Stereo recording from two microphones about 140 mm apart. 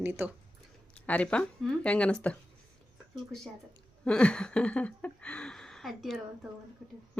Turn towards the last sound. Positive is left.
turn(degrees=0)  # may be behind; listen again after turning